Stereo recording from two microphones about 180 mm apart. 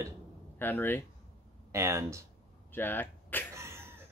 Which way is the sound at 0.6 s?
10° left (ahead or behind).